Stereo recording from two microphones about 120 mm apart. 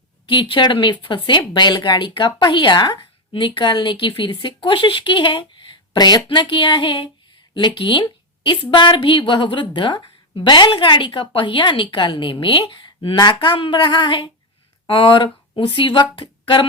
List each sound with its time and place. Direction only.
0.3 s a woman's voice: 45° left (ahead or behind)
6.2 s a woman's voice: 45° left (ahead or behind)